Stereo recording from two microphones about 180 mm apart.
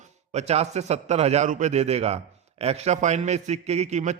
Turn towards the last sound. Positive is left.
turn(degrees=-40)  # may be behind; listen again after turning